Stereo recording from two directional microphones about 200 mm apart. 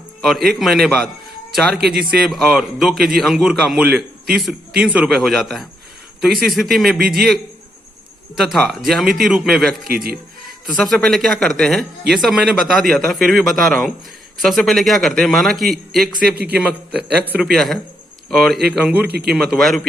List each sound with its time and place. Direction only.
0.2 s speech: centre (ahead or behind)
9.8 s speech: 50° right (ahead or behind)
10.7 s speech: centre (ahead or behind)
16.3 s speech: 50° right (ahead or behind)
16.6 s speech: 5° right (ahead or behind)